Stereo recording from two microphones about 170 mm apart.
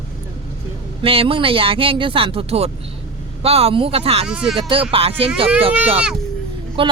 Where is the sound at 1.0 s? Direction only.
35° right (ahead or behind).